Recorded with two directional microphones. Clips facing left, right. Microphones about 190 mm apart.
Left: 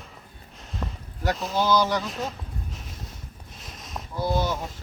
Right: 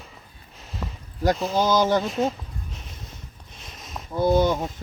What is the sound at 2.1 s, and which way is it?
Speech, centre (ahead or behind).